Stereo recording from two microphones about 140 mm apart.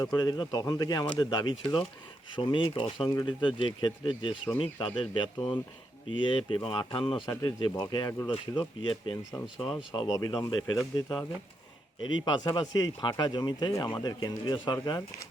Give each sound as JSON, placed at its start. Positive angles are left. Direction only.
{"t": 0.0, "sound": "speech", "side_deg": 30}